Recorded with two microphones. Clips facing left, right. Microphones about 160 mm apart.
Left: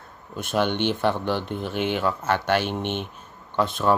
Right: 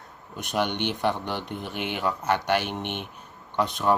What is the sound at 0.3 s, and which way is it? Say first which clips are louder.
Speech: left 3 dB; 15° right (ahead or behind).